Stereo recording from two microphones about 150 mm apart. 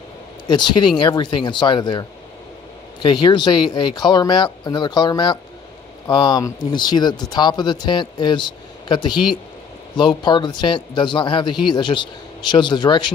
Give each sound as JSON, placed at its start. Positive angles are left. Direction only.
{"t": 0.4, "sound": "speech", "side_deg": 30}